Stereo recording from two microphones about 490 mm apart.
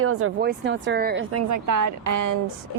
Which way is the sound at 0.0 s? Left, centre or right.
Right.